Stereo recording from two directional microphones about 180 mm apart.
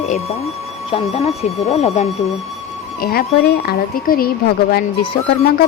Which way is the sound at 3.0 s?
55° left (ahead or behind).